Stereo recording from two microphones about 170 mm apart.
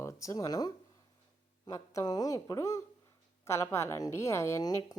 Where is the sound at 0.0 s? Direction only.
20° left (ahead or behind).